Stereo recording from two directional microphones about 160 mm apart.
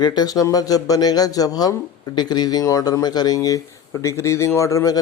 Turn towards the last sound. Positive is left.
turn(degrees=20)  # may be behind; listen again after turning